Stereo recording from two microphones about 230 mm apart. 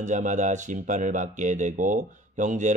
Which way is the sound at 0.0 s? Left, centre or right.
Right.